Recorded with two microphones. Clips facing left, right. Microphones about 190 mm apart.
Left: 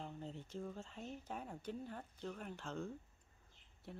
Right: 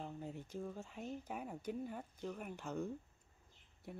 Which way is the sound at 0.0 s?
10° right (ahead or behind).